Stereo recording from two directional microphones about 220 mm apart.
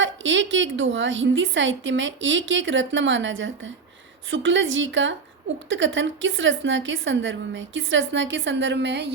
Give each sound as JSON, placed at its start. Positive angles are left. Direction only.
{"t": 0.0, "sound": "a woman's voice", "side_deg": -60}